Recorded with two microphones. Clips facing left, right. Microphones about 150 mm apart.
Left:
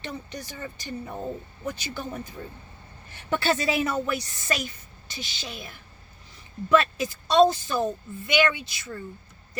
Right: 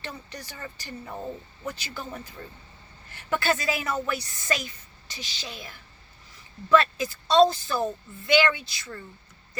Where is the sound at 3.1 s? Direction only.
25° left (ahead or behind).